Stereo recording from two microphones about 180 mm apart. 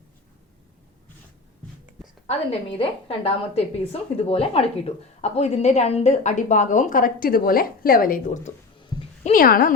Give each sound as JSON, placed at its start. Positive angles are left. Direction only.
{"t": 2.2, "sound": "a woman's voice", "side_deg": 30}
{"t": 8.8, "sound": "a sound", "side_deg": 25}
{"t": 9.2, "sound": "a woman's voice", "side_deg": 50}